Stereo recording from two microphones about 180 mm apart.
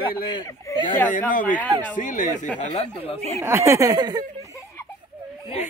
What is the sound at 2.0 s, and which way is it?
Speech, 45° left (ahead or behind).